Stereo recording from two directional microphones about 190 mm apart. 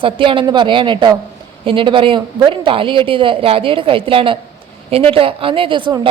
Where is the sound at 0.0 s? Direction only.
25° right (ahead or behind).